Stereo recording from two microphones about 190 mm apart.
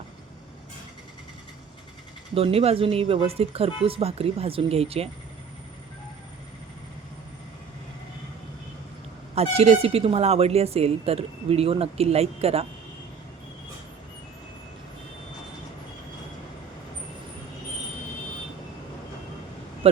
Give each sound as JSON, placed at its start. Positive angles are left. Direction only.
{"t": 2.3, "sound": "a woman's voice", "side_deg": -30}
{"t": 9.3, "sound": "a woman's voice", "side_deg": -30}
{"t": 19.8, "sound": "speech", "side_deg": -30}